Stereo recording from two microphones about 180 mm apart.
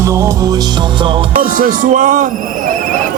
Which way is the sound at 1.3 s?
50° right (ahead or behind).